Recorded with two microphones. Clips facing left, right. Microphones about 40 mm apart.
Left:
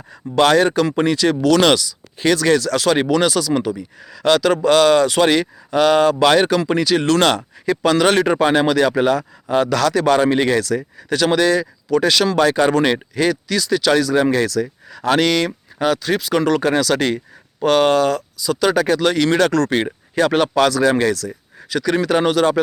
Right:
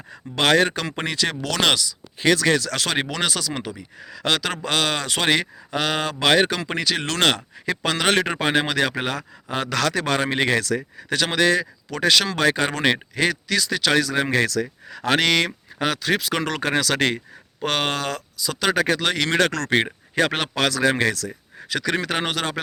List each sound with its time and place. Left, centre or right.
0.3 s speech: right
1.7 s speech: centre
2.7 s speech: right
12.4 s speech: right
15.8 s speech: right